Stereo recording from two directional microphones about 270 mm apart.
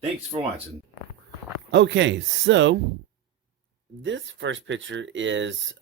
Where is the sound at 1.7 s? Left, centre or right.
Right.